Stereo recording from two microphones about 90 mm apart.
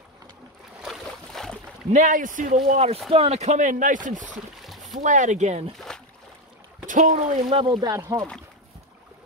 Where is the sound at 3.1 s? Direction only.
80° right.